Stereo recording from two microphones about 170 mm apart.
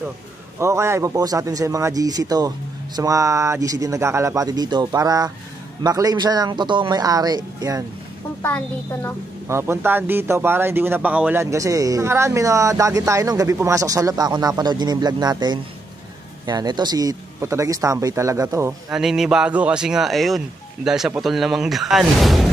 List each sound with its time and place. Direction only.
0.6 s speech: 15° right (ahead or behind)
8.4 s a woman's voice: 10° left (ahead or behind)
9.5 s speech: 15° right (ahead or behind)
11.5 s speech: 20° right (ahead or behind)
18.9 s speech: 5° right (ahead or behind)